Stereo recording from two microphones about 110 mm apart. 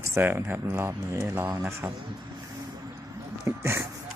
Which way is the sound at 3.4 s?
25° right (ahead or behind).